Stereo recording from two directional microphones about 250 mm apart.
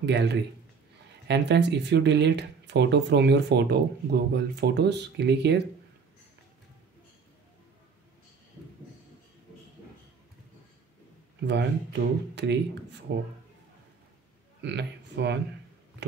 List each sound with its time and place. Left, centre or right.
0.0 s speech: right
11.4 s speech: right
14.6 s speech: right